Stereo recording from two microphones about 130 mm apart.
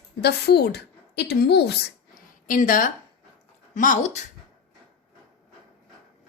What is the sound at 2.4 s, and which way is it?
Speech, 90° left.